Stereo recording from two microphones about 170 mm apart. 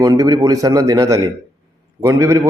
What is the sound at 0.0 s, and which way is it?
A man's voice, 20° right (ahead or behind).